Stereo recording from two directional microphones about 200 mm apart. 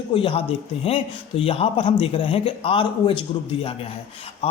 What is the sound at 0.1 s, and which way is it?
Speech, 25° left (ahead or behind).